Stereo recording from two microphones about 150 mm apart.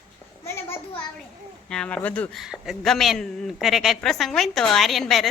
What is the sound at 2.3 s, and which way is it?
A woman's voice, centre (ahead or behind).